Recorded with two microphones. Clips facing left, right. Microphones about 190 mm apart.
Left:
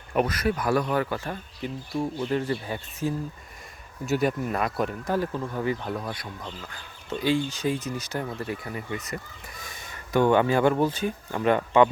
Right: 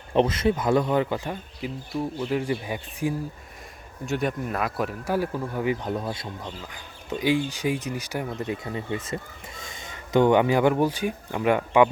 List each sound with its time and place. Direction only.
0.1 s speech: 25° right (ahead or behind)
4.0 s speech: 5° left (ahead or behind)